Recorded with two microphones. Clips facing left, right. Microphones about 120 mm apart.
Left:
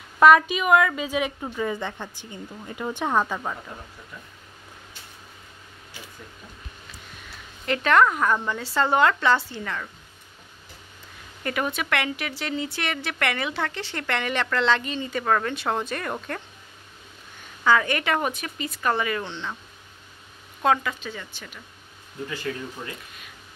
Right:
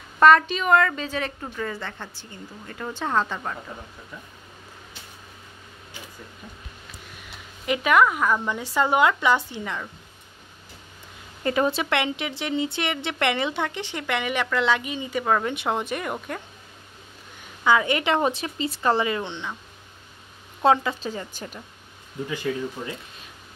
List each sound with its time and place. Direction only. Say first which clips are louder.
0.2 s a woman's voice: even; 10° left (ahead or behind)
7.6 s speech: even; 10° right (ahead or behind)
8.5 s speech: right 1 dB; 15° right (ahead or behind)
11.4 s speech: right 5 dB; 25° right (ahead or behind)
17.6 s a woman's voice: right 1 dB; 20° right (ahead or behind)
20.6 s a woman's voice: right 3 dB; 25° right (ahead or behind)
21.1 s speech: right 5 dB; 40° right (ahead or behind)
22.5 s speech: right 5 dB; 15° right (ahead or behind)